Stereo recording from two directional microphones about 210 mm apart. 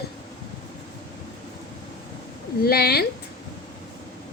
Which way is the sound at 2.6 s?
50° left (ahead or behind).